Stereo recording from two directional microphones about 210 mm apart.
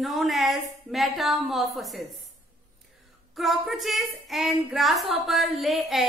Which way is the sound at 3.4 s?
Centre (ahead or behind).